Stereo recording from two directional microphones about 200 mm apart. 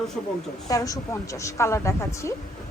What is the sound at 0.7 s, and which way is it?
A woman's voice, 15° left (ahead or behind).